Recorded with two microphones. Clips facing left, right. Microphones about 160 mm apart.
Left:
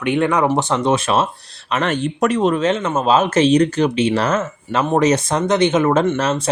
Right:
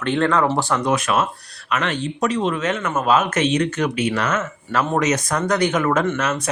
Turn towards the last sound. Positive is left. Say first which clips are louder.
# left 4 dB
turn(degrees=30)  # may be behind; listen again after turning